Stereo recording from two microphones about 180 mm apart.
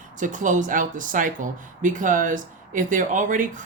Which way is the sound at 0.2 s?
45° right (ahead or behind).